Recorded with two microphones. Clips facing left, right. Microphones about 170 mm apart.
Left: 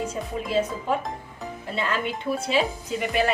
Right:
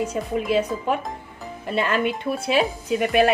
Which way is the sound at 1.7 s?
60° right (ahead or behind).